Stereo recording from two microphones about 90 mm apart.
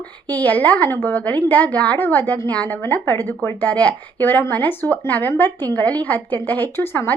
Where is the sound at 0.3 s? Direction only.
20° left (ahead or behind).